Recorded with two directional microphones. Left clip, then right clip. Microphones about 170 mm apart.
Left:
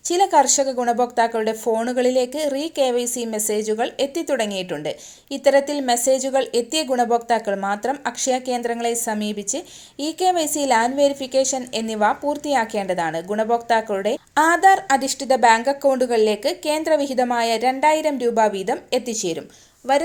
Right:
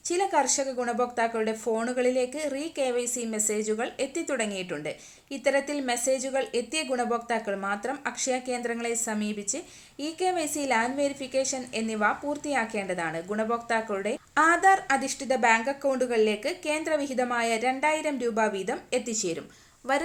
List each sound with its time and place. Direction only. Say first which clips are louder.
0.1 s a woman's voice: left 9 dB; 30° left (ahead or behind)